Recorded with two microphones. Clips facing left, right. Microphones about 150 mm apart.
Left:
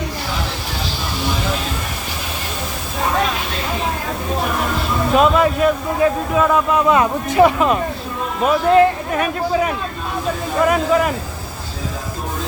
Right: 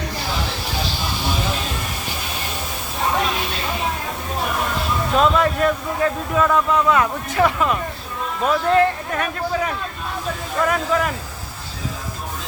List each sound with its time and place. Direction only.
5.1 s speech: 10° left (ahead or behind)
6.8 s speech: 20° left (ahead or behind)